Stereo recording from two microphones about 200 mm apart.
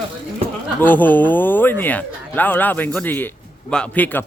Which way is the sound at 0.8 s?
10° left (ahead or behind).